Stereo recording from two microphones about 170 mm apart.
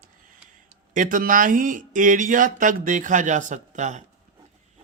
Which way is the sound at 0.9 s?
50° right (ahead or behind).